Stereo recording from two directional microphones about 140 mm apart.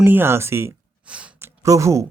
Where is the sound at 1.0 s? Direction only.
10° right (ahead or behind).